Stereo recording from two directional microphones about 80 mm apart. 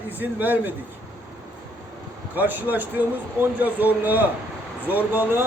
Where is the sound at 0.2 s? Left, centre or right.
Right.